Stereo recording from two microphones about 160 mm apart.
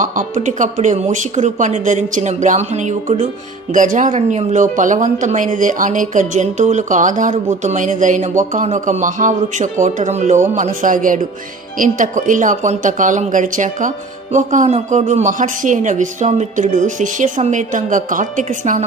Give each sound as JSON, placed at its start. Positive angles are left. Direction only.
{"t": 0.0, "sound": "a man's voice", "side_deg": -55}